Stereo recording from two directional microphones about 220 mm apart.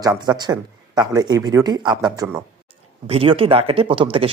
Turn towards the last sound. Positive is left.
turn(degrees=-25)  # may be behind; listen again after turning